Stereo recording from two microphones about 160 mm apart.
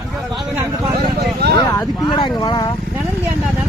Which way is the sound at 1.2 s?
90° right.